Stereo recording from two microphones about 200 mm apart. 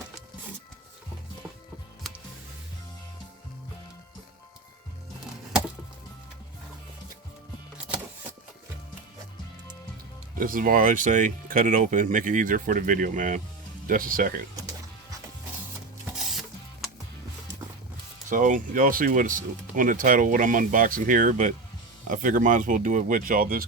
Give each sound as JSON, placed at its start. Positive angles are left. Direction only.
{"t": 2.0, "sound": "music", "side_deg": 0}
{"t": 10.3, "sound": "speech", "side_deg": -45}
{"t": 16.1, "sound": "music", "side_deg": 0}
{"t": 18.3, "sound": "speech", "side_deg": -40}